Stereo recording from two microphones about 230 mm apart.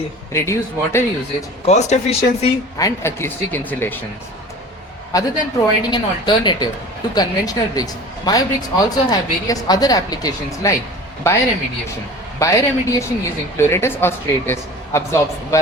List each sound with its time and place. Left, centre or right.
0.3 s a man's voice: centre
1.6 s speech: left
2.7 s a man's voice: centre
5.1 s a man's voice: centre
12.4 s a man's voice: centre